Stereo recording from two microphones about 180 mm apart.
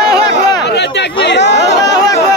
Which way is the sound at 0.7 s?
70° left (ahead or behind).